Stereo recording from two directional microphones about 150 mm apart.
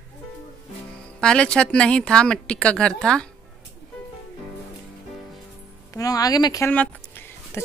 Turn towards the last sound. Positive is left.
turn(degrees=10)  # may be behind; listen again after turning